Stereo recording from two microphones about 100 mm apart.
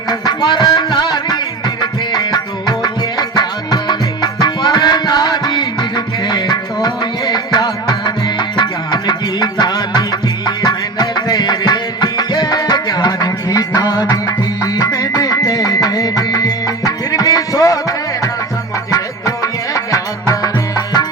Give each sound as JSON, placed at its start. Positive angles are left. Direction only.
{"t": 0.1, "sound": "music", "side_deg": 45}